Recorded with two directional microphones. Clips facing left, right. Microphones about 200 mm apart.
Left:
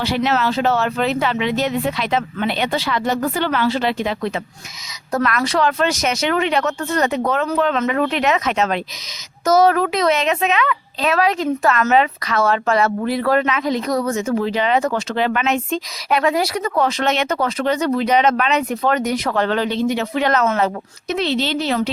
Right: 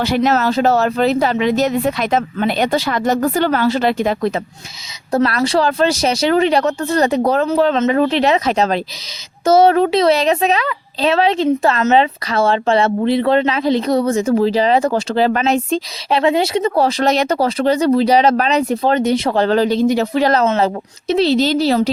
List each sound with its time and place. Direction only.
0.0 s speech: 45° right (ahead or behind)
5.1 s a child's voice: 30° right (ahead or behind)